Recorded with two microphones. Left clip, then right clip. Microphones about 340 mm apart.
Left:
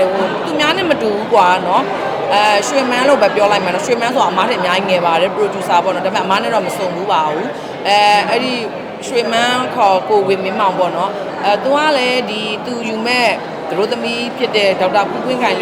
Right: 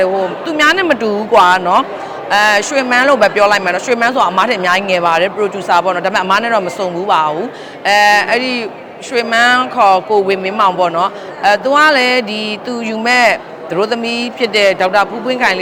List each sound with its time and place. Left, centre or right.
0.5 s a woman's voice: right